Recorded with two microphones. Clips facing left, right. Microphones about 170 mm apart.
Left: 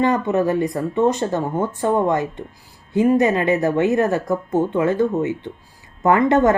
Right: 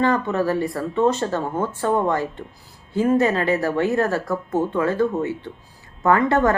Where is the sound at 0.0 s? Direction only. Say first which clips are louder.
Left 2 dB; 20° left (ahead or behind).